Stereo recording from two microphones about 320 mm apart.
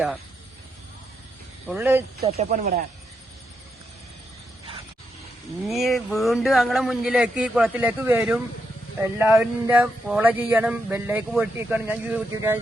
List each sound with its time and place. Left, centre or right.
1.6 s speech: centre
2.2 s speech: right
5.6 s speech: centre